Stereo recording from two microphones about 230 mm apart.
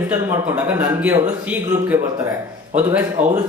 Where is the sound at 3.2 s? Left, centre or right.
Right.